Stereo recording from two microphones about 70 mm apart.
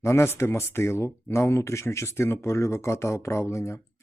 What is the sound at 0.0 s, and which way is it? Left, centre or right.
A man's voice, left.